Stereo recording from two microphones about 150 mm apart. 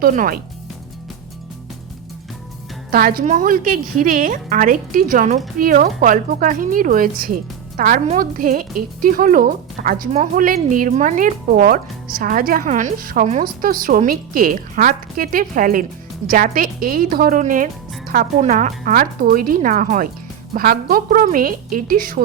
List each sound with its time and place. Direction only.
0.0 s a woman's voice: 75° right (ahead or behind)
2.9 s a woman's voice: 75° right (ahead or behind)
3.2 s a woman's voice: 65° right (ahead or behind)
10.1 s a woman's voice: 45° right (ahead or behind)
10.4 s a woman's voice: 65° right (ahead or behind)
20.5 s a woman's voice: 80° right